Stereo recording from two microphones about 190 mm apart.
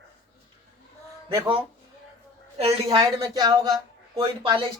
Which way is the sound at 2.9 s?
20° right (ahead or behind).